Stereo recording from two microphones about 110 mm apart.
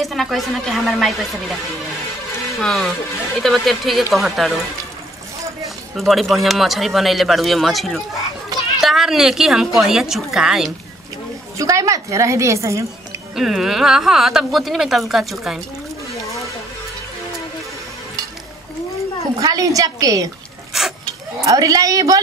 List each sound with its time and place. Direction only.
0.0 s a woman's voice: centre (ahead or behind)
2.6 s a woman's voice: centre (ahead or behind)
5.9 s a woman's voice: centre (ahead or behind)
11.5 s a woman's voice: 30° right (ahead or behind)
13.4 s a woman's voice: 5° right (ahead or behind)
19.4 s a woman's voice: 30° right (ahead or behind)
20.7 s speech: 5° right (ahead or behind)
21.5 s a woman's voice: 30° right (ahead or behind)